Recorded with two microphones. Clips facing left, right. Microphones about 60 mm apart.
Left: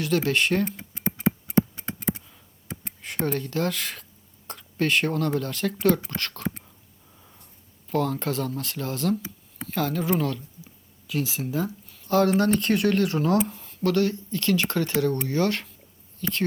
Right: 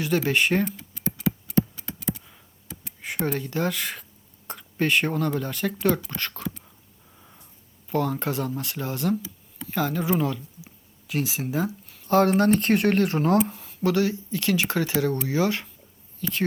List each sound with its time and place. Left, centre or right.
0.0 s speech: centre
0.8 s music: left
3.2 s speech: centre
7.2 s a sound: centre
7.9 s speech: centre
12.0 s speech: right
13.6 s speech: centre